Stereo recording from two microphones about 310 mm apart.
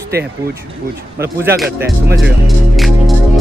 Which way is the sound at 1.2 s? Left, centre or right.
Centre.